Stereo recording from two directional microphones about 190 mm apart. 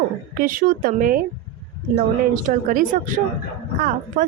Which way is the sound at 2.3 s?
45° right (ahead or behind).